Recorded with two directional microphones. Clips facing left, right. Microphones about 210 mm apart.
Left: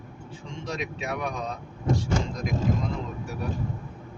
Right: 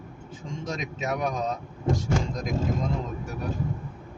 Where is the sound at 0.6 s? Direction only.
45° right (ahead or behind).